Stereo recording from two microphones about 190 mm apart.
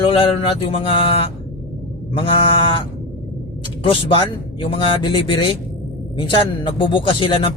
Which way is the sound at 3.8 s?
30° left (ahead or behind).